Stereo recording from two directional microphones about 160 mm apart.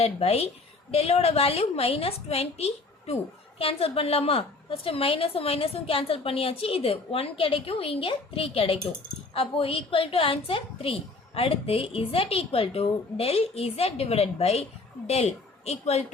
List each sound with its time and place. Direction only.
0.0 s a woman's voice: 40° left (ahead or behind)